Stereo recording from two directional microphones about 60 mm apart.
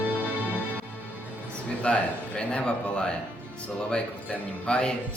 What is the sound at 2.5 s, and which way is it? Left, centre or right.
Speech, centre.